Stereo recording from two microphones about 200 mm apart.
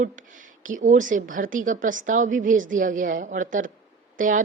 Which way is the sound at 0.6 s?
40° right (ahead or behind).